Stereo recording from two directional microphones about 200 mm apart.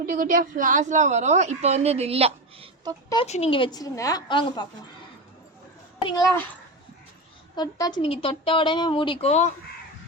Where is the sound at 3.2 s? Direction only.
30° left (ahead or behind).